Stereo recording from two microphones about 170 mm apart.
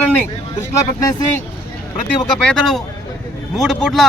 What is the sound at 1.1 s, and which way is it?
Speech, 20° left (ahead or behind).